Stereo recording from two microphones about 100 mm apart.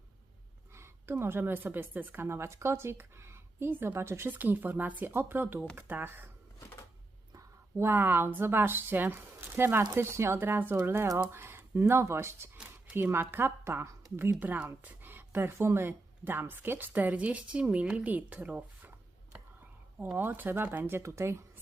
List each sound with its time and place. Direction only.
0.8 s a woman's voice: 25° right (ahead or behind)
7.3 s a woman's voice: 25° right (ahead or behind)
12.5 s a sound: 15° right (ahead or behind)
13.1 s a woman's voice: 20° right (ahead or behind)